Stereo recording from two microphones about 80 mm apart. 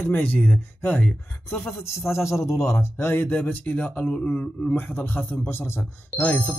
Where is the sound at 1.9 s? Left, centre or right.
Left.